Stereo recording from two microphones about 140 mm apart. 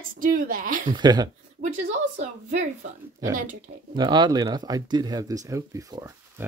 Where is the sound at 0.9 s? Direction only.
30° right (ahead or behind).